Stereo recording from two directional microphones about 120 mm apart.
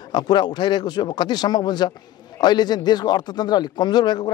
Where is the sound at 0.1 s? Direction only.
35° left (ahead or behind).